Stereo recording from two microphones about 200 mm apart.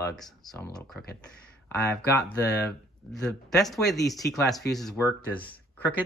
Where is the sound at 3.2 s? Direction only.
Centre (ahead or behind).